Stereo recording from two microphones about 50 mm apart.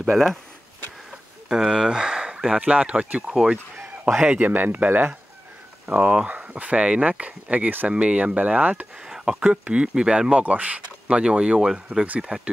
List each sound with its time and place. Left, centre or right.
0.1 s speech: centre
1.5 s speech: centre
3.3 s speech: centre
4.2 s speech: right
9.0 s speech: centre